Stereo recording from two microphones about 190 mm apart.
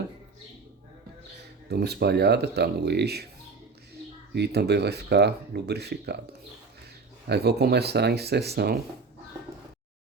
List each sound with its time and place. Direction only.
1.4 s speech: 60° right (ahead or behind)
4.4 s speech: 60° right (ahead or behind)
7.3 s speech: 60° right (ahead or behind)